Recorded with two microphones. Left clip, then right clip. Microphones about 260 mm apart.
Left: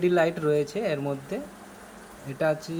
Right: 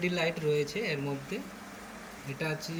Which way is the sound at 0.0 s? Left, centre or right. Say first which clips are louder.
Left 8 dB; centre.